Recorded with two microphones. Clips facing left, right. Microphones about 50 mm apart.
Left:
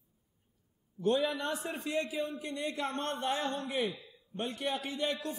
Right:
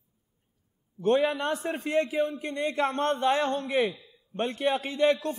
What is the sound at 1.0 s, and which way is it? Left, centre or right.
A man's voice, right.